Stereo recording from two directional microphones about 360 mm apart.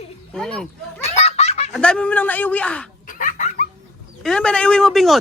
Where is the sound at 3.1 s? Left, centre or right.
Left.